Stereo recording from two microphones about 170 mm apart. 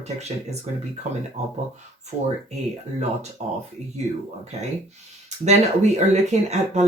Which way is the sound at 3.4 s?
40° right (ahead or behind).